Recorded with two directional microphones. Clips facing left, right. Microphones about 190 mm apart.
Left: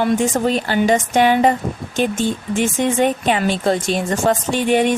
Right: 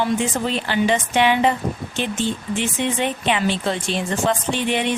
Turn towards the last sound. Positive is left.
turn(degrees=45)  # may be behind; listen again after turning